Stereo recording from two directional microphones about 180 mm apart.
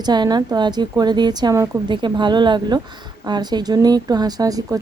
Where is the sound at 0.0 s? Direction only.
25° right (ahead or behind).